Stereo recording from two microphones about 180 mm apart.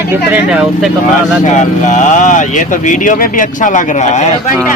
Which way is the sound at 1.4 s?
40° left (ahead or behind).